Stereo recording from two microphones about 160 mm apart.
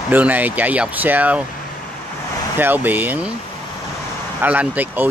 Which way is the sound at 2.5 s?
10° right (ahead or behind).